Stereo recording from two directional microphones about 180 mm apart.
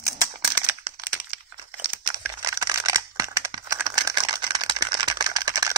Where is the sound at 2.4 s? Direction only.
15° right (ahead or behind).